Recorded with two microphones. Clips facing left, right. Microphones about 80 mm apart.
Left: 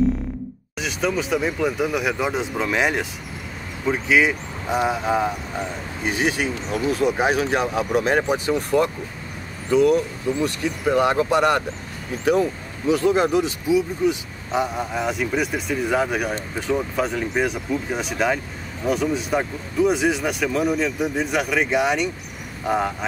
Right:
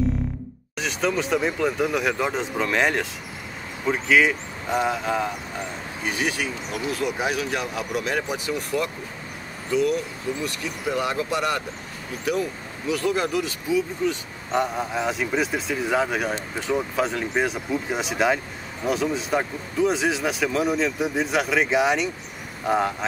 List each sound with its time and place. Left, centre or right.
0.7 s speech: centre
14.5 s speech: centre